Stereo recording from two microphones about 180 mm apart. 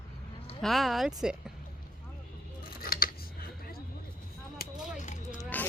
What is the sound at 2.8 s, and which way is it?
Scissors, 55° left (ahead or behind).